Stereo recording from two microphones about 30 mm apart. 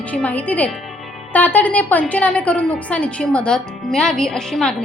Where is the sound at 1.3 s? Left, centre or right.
Left.